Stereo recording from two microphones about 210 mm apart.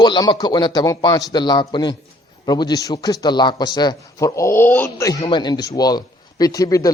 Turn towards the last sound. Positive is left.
turn(degrees=15)  # may be behind; listen again after turning